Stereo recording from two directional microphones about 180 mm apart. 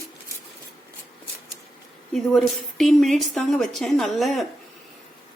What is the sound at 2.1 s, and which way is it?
A woman's voice, centre (ahead or behind).